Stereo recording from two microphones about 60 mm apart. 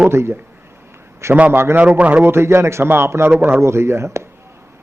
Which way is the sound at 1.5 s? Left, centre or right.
Right.